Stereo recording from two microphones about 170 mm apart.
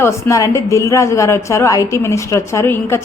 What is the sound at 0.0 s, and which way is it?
A woman's voice, 15° left (ahead or behind).